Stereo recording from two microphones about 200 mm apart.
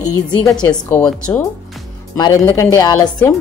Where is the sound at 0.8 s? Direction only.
5° left (ahead or behind).